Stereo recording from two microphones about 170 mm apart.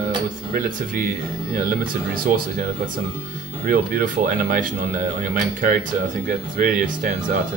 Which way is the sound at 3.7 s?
55° right (ahead or behind).